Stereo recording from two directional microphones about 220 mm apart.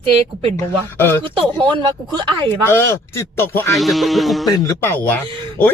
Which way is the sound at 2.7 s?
10° left (ahead or behind).